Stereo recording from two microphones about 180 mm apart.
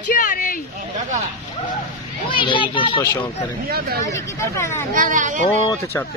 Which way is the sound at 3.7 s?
60° right (ahead or behind).